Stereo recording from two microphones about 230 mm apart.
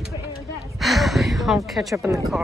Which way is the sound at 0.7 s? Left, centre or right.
Centre.